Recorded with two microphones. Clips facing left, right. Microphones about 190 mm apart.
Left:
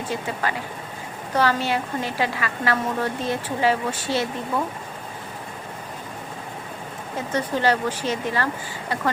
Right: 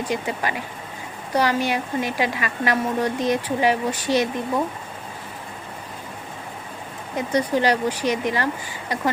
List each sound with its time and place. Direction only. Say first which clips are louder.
0.0 s a woman's voice: right 2 dB; 15° right (ahead or behind)
7.2 s a woman's voice: right 3 dB; 15° right (ahead or behind)